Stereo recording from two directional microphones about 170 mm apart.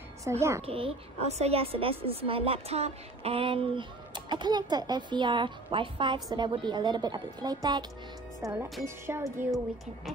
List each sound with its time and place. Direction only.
0.2 s a child's voice: 15° right (ahead or behind)
0.6 s a woman's voice: 35° right (ahead or behind); by 9.6 s 15° right (ahead or behind)